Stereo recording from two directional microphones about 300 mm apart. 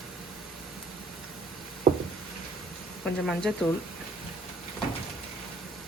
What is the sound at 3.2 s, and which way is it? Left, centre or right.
Speech, centre.